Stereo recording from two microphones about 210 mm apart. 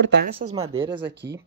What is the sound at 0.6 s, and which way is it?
Speech, 25° right (ahead or behind).